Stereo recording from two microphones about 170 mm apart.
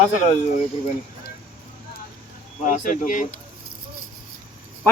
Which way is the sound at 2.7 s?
50° left (ahead or behind).